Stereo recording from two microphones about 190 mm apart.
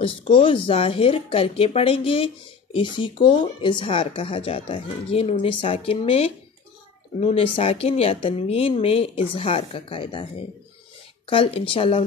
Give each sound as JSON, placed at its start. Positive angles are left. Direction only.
{"t": 0.0, "sound": "a woman's voice", "side_deg": 30}
{"t": 11.2, "sound": "speech", "side_deg": 30}